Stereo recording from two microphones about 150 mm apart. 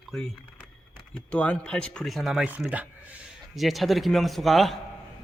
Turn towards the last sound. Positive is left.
turn(degrees=0)  # may be behind; listen again after turning